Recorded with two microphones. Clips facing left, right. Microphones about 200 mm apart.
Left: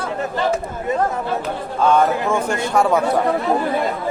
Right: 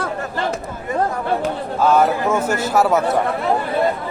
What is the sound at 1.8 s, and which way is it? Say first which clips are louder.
A man's voice: even; 5° right (ahead or behind).